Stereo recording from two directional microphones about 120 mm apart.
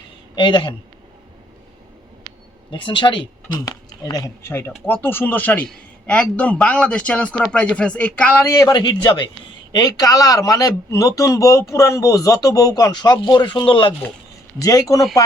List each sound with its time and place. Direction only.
0.3 s speech: 40° left (ahead or behind)
2.6 s speech: 45° left (ahead or behind)
4.9 s a man's voice: 15° left (ahead or behind)
8.4 s speech: 30° left (ahead or behind)
14.6 s speech: 30° left (ahead or behind)